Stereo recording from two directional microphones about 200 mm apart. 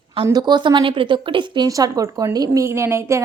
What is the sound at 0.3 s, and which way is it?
Speech, 20° right (ahead or behind).